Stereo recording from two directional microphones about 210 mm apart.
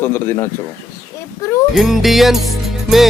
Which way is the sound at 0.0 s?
10° left (ahead or behind).